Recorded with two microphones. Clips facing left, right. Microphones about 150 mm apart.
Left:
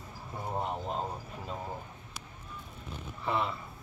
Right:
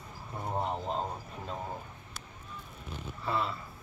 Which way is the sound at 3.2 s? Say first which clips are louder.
Left 1 dB; 15° left (ahead or behind).